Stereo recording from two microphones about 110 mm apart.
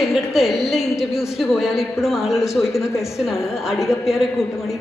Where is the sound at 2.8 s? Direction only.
25° left (ahead or behind).